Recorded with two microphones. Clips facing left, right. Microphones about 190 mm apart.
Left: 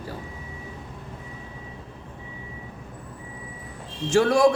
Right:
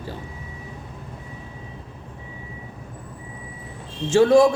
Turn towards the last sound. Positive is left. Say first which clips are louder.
# right 5 dB
turn(degrees=-25)  # may be behind; listen again after turning